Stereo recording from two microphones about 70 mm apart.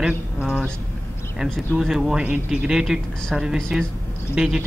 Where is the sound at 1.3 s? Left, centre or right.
Centre.